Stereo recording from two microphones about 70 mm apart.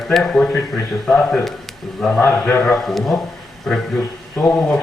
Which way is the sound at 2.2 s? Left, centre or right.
Left.